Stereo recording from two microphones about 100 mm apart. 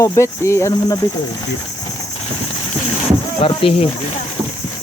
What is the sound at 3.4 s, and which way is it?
Speech, 65° left (ahead or behind).